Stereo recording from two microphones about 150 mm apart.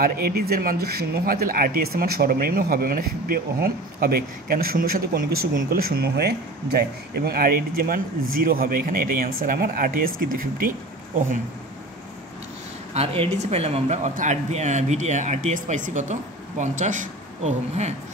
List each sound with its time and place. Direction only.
0.0 s speech: 90° right; by 10.7 s 70° right (ahead or behind)
12.9 s speech: 40° right (ahead or behind)